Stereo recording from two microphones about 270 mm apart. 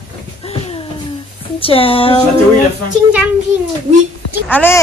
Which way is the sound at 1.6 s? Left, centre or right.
Left.